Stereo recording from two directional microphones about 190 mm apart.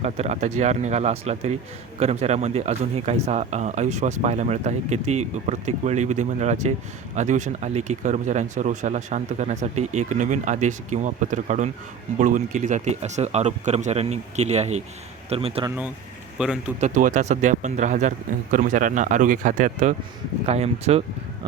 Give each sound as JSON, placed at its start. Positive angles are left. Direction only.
{"t": 0.0, "sound": "a man's voice", "side_deg": -35}
{"t": 16.4, "sound": "a man's voice", "side_deg": -5}
{"t": 16.8, "sound": "a man's voice", "side_deg": -40}